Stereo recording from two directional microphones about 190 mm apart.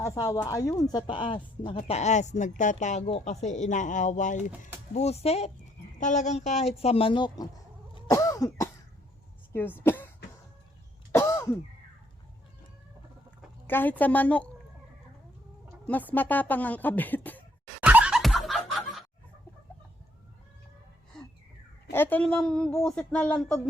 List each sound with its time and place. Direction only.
0.0 s speech: 15° left (ahead or behind)
1.7 s speech: 40° left (ahead or behind)
7.9 s cough: 20° left (ahead or behind)
9.5 s speech: 10° left (ahead or behind)
11.1 s throat clearing: 15° left (ahead or behind)
13.7 s speech: 10° left (ahead or behind)
15.9 s speech: 10° left (ahead or behind)
17.7 s laughter: 10° right (ahead or behind)
21.9 s speech: 10° left (ahead or behind)